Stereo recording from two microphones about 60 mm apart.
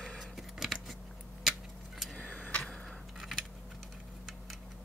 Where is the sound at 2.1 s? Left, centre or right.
Left.